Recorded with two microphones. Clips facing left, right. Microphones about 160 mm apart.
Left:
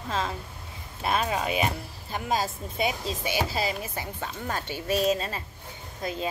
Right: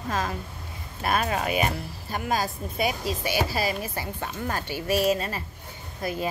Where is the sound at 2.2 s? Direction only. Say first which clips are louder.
Even; 25° left (ahead or behind).